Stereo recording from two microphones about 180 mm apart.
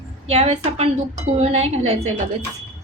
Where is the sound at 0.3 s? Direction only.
35° right (ahead or behind).